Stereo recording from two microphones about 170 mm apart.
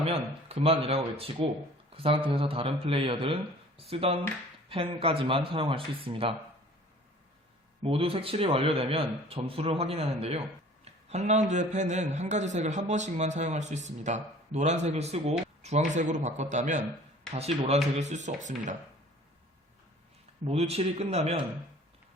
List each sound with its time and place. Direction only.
0.0 s a man's voice: 35° right (ahead or behind)
7.8 s a man's voice: 35° right (ahead or behind)
20.4 s a man's voice: 35° right (ahead or behind)